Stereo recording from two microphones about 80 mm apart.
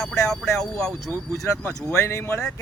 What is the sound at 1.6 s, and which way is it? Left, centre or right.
Speech, left.